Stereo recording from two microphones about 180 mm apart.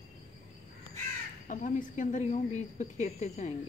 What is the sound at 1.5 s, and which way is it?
A woman's voice, 45° left (ahead or behind).